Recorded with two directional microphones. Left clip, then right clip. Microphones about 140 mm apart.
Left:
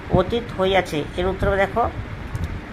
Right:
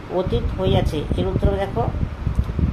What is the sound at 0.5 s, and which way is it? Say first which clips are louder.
Speech: left 4 dB; 30° left (ahead or behind).